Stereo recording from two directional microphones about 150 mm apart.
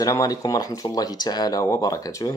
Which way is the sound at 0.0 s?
25° left (ahead or behind).